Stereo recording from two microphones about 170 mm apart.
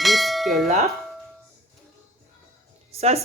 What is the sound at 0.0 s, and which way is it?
Bell, centre (ahead or behind).